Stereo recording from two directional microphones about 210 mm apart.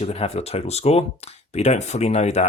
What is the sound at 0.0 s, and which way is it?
Speech, 30° left (ahead or behind).